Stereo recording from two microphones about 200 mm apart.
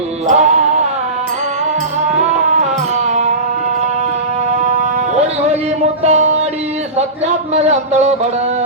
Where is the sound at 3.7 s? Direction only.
35° right (ahead or behind).